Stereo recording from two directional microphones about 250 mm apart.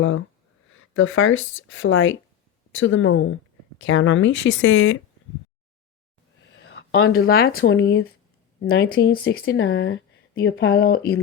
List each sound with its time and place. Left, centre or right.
0.7 s speech: left
6.4 s speech: left